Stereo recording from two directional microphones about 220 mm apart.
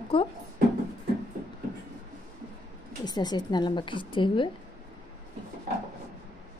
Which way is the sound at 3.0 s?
20° left (ahead or behind).